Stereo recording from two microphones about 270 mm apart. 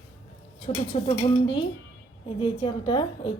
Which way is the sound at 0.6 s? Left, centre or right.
Left.